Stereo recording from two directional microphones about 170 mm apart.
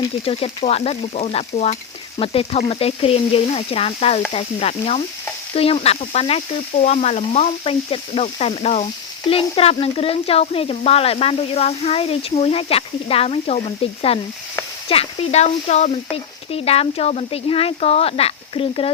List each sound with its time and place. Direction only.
0.0 s speech: 35° left (ahead or behind)